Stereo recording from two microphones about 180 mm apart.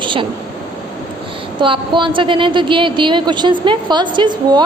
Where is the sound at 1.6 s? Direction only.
25° right (ahead or behind).